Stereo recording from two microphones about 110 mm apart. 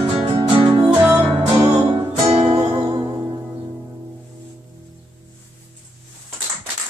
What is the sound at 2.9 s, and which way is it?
Music, 40° right (ahead or behind).